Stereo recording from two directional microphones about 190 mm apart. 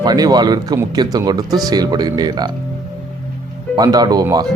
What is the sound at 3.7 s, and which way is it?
Speech, 20° right (ahead or behind).